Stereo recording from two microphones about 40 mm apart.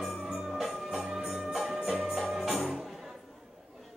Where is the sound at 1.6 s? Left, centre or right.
Centre.